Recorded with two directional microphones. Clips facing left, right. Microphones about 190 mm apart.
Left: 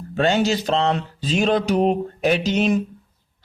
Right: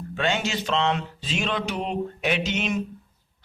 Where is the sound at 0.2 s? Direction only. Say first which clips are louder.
Left 7 dB; 35° left (ahead or behind).